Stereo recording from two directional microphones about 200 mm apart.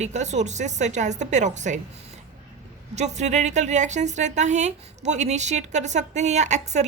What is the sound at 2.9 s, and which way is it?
A woman's voice, 35° right (ahead or behind).